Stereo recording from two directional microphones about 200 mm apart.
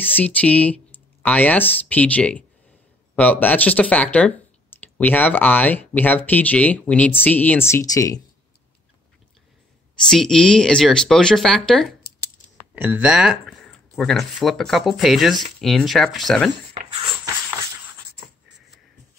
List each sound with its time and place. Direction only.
0.0 s speech: 10° left (ahead or behind)
10.0 s speech: 5° left (ahead or behind)
12.7 s speech: 10° right (ahead or behind)
16.7 s a sound: 30° right (ahead or behind)